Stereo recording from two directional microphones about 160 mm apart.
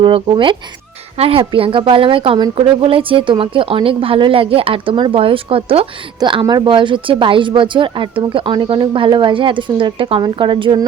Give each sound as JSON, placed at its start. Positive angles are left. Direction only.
{"t": 0.0, "sound": "a woman's voice", "side_deg": -30}